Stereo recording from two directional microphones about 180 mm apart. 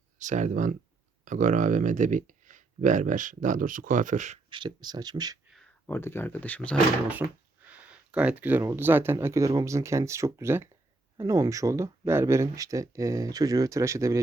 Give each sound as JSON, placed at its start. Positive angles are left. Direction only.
{"t": 0.2, "sound": "speech", "side_deg": -45}
{"t": 4.4, "sound": "speech", "side_deg": -25}
{"t": 5.5, "sound": "speech", "side_deg": 5}
{"t": 7.1, "sound": "speech", "side_deg": -10}